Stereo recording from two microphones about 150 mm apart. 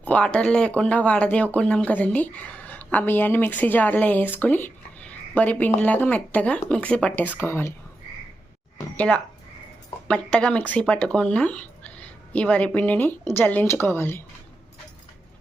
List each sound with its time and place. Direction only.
0.0 s speech: 10° left (ahead or behind)
9.0 s speech: 10° left (ahead or behind)